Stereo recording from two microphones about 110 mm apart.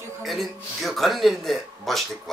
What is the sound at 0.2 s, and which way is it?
A man's voice, centre (ahead or behind).